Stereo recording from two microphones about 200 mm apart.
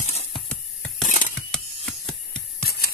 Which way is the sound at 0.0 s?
35° left (ahead or behind).